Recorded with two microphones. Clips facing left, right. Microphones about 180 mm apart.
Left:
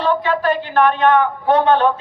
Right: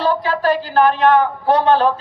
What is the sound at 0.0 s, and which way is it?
A woman's voice, 35° right (ahead or behind).